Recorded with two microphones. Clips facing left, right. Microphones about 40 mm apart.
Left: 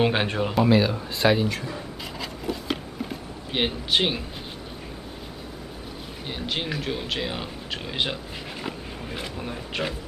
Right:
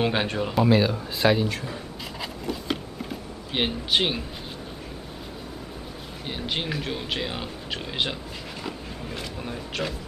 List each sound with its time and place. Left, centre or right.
0.0 s speech: centre
2.1 s a sound: centre
3.5 s speech: centre
6.2 s speech: centre
8.6 s a sound: centre
9.8 s speech: centre